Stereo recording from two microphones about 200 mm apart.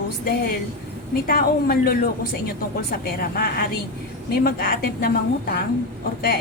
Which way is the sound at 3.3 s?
50° left (ahead or behind).